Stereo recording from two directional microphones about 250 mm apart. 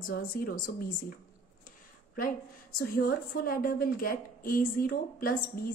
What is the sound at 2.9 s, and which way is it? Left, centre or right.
A woman's voice, left.